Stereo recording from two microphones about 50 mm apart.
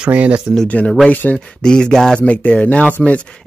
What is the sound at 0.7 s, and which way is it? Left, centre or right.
Speech, left.